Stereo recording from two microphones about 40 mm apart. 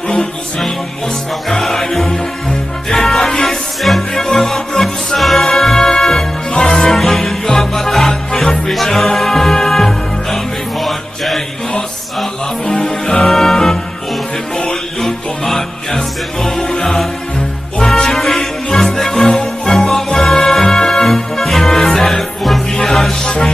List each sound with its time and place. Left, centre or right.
0.2 s music: centre
12.8 s music: centre